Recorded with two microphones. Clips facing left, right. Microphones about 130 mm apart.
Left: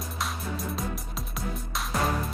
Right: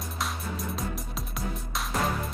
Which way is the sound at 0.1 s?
Centre (ahead or behind).